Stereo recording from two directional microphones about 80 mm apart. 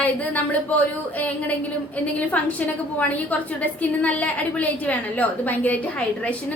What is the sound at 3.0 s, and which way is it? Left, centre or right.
A woman's voice, left.